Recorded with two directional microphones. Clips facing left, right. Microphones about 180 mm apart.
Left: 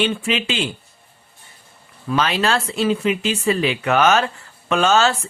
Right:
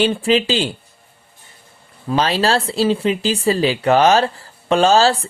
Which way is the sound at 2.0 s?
30° right (ahead or behind).